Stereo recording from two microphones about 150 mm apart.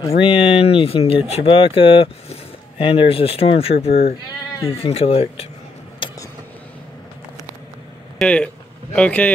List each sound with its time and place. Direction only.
0.1 s speech: 35° left (ahead or behind)
8.2 s speech: 5° left (ahead or behind)